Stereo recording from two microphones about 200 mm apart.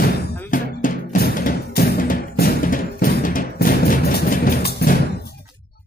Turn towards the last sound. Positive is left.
turn(degrees=50)  # may be behind; listen again after turning